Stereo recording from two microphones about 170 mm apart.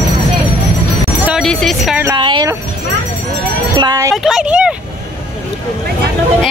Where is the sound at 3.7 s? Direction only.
20° right (ahead or behind).